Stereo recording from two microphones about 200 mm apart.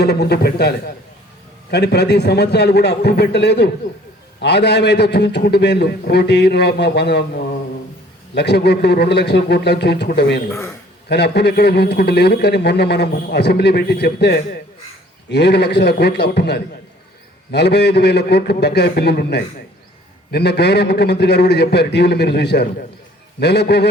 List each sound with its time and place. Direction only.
0.0 s a man's voice: 55° left (ahead or behind)
8.4 s a man's voice: 55° left (ahead or behind)
10.5 s a man's voice: 15° left (ahead or behind)
11.1 s a man's voice: 55° left (ahead or behind)